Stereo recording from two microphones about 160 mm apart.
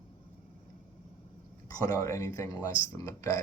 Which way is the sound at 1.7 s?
20° left (ahead or behind).